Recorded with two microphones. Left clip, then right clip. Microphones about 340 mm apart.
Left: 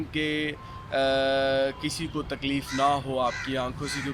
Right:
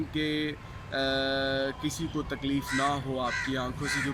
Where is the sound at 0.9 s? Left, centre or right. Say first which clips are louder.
Left 5 dB; centre.